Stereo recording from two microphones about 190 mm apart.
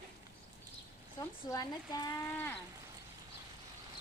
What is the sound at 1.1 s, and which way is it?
Speech, 20° left (ahead or behind).